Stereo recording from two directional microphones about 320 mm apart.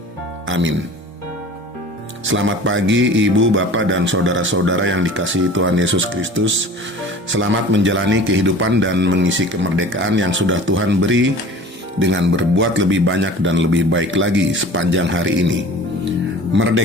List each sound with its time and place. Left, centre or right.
0.4 s speech: right
2.2 s speech: right
16.0 s music: right